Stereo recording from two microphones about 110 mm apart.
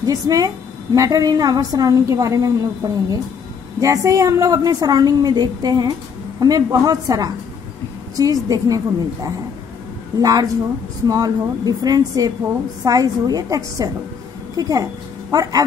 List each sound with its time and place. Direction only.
0.0 s a woman's voice: 30° right (ahead or behind)